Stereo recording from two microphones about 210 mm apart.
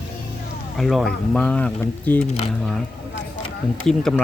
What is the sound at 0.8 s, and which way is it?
Speech, centre (ahead or behind).